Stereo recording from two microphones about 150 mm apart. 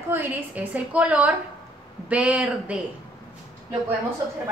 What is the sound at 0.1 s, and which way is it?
A woman's voice, 10° right (ahead or behind).